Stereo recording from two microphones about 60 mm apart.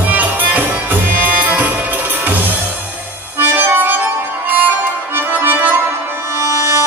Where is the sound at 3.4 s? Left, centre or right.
Right.